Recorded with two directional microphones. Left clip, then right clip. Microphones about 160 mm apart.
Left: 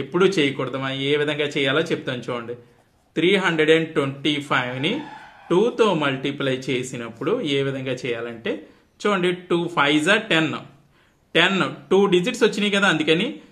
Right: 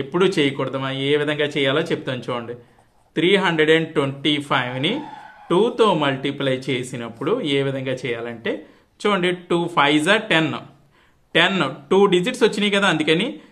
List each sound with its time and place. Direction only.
0.1 s speech: 35° right (ahead or behind)